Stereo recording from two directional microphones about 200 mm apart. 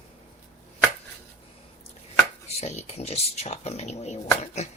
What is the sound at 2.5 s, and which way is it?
Speech, 30° left (ahead or behind).